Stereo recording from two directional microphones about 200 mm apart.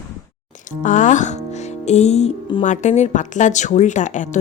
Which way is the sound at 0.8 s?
40° left (ahead or behind).